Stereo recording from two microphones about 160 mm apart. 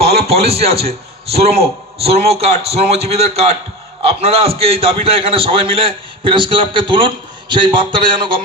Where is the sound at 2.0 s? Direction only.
40° right (ahead or behind).